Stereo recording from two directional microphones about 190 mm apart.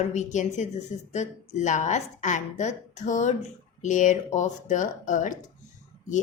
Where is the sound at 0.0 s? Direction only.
40° left (ahead or behind).